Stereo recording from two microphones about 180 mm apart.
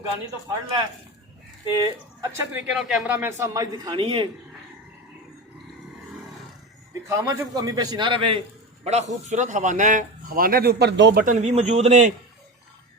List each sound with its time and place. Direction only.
1.8 s speech: 20° right (ahead or behind)
6.9 s a man's voice: 15° right (ahead or behind)
8.8 s a man's voice: 35° right (ahead or behind); by 11.2 s 75° right (ahead or behind)
11.2 s a man's voice: 45° right (ahead or behind)